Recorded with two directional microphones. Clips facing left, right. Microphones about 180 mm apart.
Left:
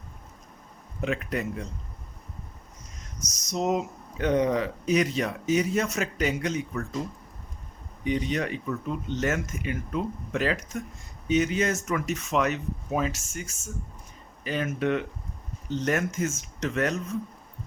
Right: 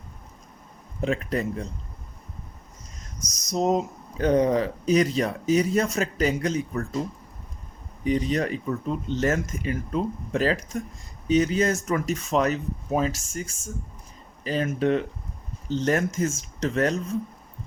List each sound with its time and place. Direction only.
1.0 s speech: 30° right (ahead or behind)
3.5 s speech: 35° right (ahead or behind)
8.0 s speech: 35° right (ahead or behind)